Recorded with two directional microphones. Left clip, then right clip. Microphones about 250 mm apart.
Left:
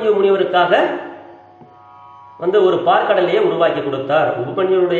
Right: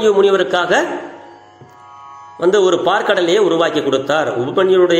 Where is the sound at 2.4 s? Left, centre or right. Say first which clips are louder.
Right 1 dB; right.